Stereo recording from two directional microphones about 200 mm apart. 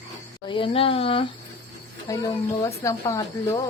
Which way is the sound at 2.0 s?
15° left (ahead or behind).